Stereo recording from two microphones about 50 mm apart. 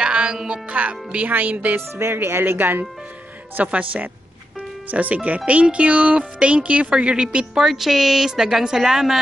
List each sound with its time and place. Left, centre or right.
0.0 s music: centre
0.5 s speech: right
1.8 s speech: right
2.2 s speech: right
3.6 s speech: right
7.5 s a woman's voice: centre